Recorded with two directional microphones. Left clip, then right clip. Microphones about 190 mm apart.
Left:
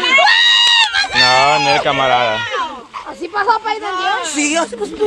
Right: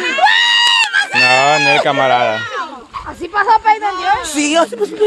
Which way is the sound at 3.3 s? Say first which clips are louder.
Right 5 dB; 45° right (ahead or behind).